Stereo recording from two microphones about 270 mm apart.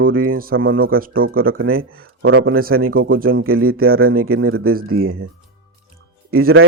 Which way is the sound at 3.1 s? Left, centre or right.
Right.